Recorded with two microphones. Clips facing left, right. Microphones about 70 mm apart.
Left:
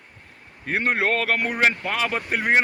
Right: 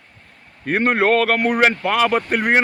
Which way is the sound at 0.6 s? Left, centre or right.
Right.